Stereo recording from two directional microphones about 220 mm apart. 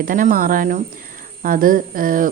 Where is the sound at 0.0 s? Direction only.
40° right (ahead or behind).